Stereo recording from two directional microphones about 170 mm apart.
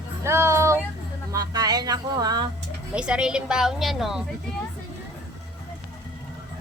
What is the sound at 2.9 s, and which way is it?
Speech, 5° right (ahead or behind).